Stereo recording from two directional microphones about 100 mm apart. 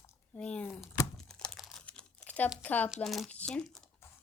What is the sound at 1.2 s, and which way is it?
Crumpling, 5° left (ahead or behind).